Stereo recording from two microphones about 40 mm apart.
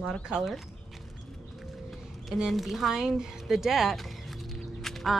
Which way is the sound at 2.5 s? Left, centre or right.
Centre.